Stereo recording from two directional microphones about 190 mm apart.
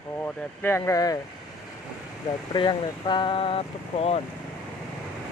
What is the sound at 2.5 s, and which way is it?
Speech, 25° left (ahead or behind).